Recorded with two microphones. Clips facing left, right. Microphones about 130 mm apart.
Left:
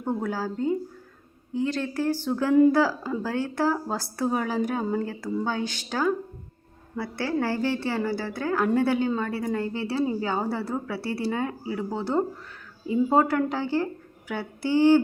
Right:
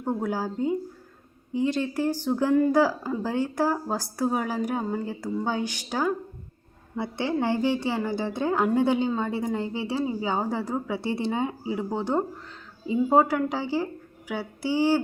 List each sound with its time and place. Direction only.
0.0 s a woman's voice: 10° right (ahead or behind)